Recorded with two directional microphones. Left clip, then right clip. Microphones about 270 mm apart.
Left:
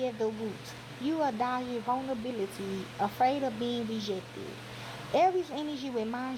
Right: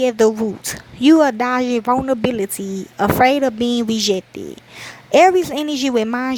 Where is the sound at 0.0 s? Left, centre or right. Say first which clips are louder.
Right 17 dB; right.